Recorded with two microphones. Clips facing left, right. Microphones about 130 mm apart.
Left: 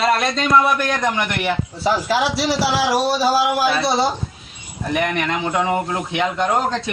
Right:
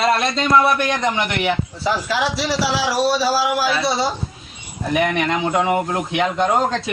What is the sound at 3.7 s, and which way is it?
Speech, 25° left (ahead or behind).